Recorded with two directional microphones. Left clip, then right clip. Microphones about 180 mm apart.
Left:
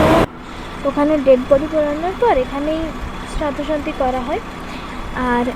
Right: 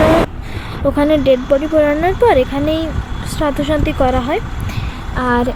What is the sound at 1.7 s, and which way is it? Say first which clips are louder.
Speech: right 5 dB; 35° right (ahead or behind).